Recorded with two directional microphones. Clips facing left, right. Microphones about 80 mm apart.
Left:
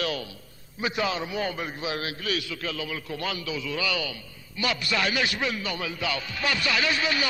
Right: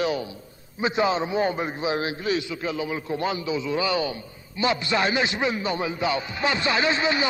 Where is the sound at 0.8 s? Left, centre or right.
Right.